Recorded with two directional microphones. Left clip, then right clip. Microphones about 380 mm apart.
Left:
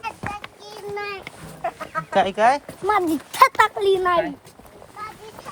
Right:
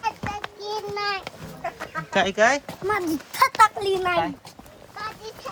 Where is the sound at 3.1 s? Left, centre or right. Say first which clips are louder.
Left 6 dB; centre.